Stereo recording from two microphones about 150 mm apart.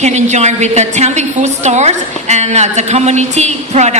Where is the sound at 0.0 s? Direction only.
50° right (ahead or behind).